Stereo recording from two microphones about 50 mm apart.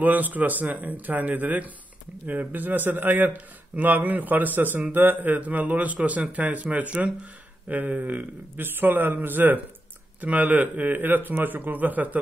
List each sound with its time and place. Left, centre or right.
0.0 s speech: right